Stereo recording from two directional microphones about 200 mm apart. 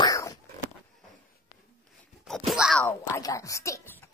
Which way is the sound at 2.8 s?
15° left (ahead or behind).